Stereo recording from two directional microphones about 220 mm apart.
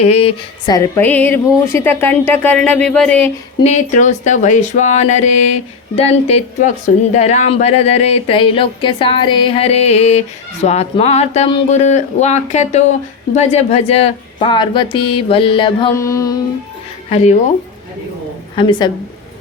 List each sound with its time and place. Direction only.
0.0 s speech: 30° left (ahead or behind); by 3.3 s 5° left (ahead or behind)
3.6 s speech: 30° left (ahead or behind); by 16.4 s 15° left (ahead or behind)
17.1 s speech: 30° left (ahead or behind)
18.5 s speech: 20° left (ahead or behind)